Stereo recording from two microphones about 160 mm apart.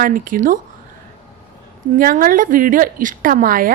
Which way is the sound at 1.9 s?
60° right (ahead or behind).